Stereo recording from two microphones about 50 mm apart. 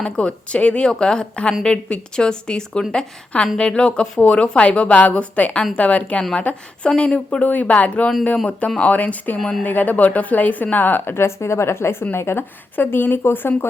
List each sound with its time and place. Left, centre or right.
0.0 s a woman's voice: left
9.4 s speech: centre
9.6 s speech: left
11.1 s a woman's voice: left
12.7 s a woman's voice: left